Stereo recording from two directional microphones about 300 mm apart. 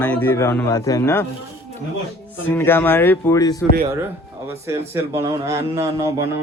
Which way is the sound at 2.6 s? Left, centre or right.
Centre.